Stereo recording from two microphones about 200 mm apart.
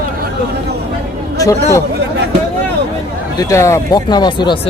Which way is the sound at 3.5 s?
15° left (ahead or behind).